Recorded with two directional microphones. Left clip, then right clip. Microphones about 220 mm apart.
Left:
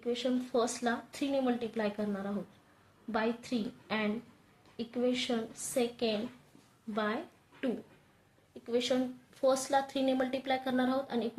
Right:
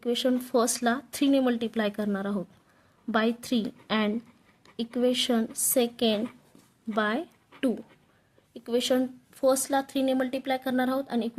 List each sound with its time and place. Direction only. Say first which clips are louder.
0.0 s a woman's voice: right 7 dB; 40° right (ahead or behind)
8.5 s speech: right 6 dB; 40° right (ahead or behind)